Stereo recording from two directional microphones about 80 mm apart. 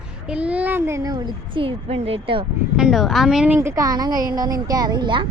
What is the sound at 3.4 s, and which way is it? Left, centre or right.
Speech, right.